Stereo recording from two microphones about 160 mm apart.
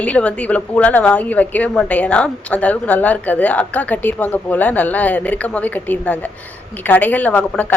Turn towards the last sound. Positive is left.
turn(degrees=10)  # may be behind; listen again after turning